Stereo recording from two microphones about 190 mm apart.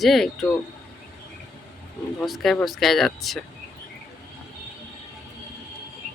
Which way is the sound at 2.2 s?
Centre (ahead or behind).